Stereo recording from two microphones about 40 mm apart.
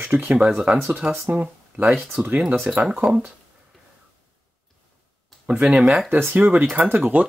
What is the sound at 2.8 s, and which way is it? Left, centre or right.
Speech, centre.